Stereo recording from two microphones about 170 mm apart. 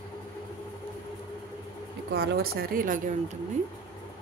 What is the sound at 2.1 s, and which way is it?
Speech, 75° right (ahead or behind).